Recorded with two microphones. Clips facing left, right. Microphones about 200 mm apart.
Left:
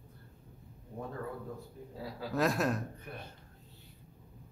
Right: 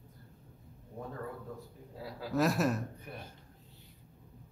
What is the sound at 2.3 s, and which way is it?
Speech, 5° right (ahead or behind).